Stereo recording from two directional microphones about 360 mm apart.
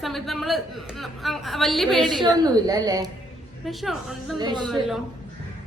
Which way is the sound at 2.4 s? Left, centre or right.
Centre.